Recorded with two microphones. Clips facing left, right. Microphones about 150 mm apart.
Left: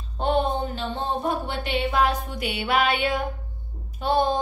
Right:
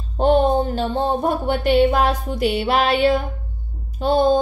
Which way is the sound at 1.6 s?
45° right (ahead or behind).